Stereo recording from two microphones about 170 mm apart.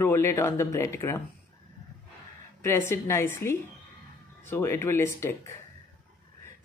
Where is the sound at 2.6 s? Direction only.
15° left (ahead or behind).